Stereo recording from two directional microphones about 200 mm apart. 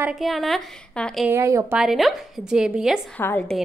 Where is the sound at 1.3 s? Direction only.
15° right (ahead or behind).